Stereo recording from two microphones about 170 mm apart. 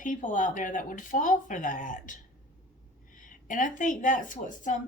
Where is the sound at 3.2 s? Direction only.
50° left (ahead or behind).